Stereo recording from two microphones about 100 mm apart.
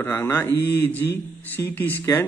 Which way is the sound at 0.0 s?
25° left (ahead or behind).